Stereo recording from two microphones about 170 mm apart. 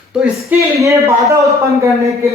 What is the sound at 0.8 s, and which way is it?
Speech, 20° right (ahead or behind).